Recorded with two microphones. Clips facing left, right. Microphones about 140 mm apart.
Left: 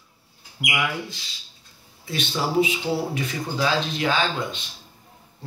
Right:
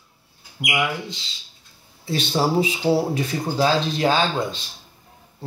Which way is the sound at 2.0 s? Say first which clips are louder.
Right 5 dB; 35° right (ahead or behind).